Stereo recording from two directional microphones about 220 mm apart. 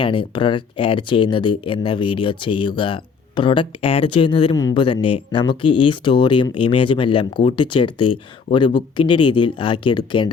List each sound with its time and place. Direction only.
0.0 s speech: 20° left (ahead or behind)